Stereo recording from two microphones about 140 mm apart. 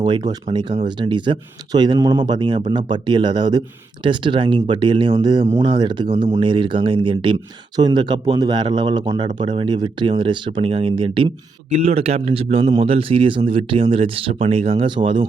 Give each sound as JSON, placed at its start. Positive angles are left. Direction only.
{"t": 0.0, "sound": "a man's voice", "side_deg": -30}
{"t": 11.7, "sound": "a man's voice", "side_deg": -50}